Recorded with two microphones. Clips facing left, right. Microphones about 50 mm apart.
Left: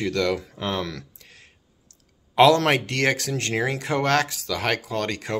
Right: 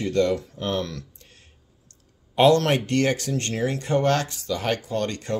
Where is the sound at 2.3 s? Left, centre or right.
Left.